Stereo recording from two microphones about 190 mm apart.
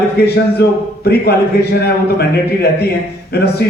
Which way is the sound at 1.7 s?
55° left (ahead or behind).